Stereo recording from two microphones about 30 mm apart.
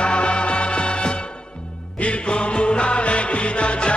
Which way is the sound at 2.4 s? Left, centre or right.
Left.